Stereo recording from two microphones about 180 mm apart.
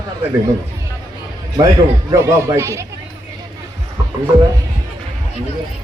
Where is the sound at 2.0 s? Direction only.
15° right (ahead or behind).